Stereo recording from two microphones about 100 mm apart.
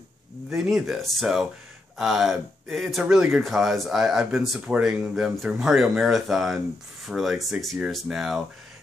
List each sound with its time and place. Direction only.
0.5 s speech: 5° right (ahead or behind)